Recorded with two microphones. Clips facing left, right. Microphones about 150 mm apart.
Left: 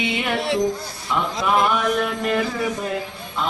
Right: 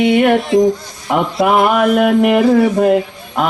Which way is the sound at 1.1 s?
70° right (ahead or behind).